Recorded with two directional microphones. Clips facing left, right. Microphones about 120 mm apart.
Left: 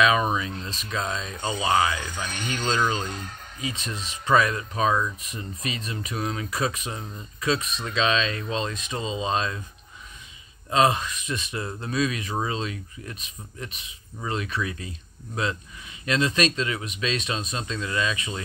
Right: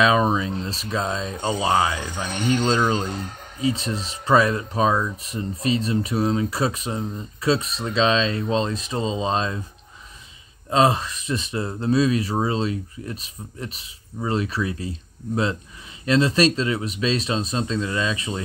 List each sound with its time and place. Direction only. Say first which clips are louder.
0.0 s speech: right 3 dB; 30° right (ahead or behind)
10.7 s speech: right 2 dB; 30° right (ahead or behind)